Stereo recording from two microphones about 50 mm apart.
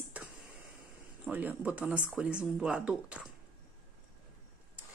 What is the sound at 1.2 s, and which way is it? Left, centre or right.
Speech, right.